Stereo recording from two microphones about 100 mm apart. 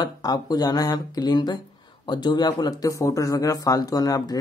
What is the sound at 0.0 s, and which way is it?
Speech, 40° left (ahead or behind).